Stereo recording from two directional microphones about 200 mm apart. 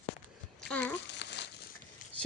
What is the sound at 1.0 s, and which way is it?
Crumpling, 60° left (ahead or behind).